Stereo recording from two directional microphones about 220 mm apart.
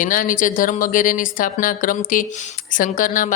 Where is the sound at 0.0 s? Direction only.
40° left (ahead or behind).